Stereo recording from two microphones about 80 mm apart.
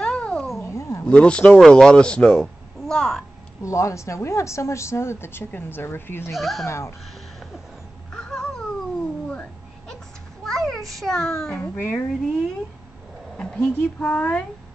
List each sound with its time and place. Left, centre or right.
0.0 s cat: centre
0.6 s a sound: left
1.0 s speech: centre
3.6 s a woman's voice: left
6.3 s speech: centre
6.6 s a woman's voice: left
8.1 s a sound: centre
11.7 s speech: left
13.4 s a sound: centre
13.7 s speech: left